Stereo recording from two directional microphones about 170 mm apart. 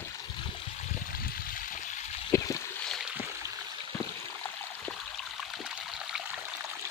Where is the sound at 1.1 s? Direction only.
55° left (ahead or behind).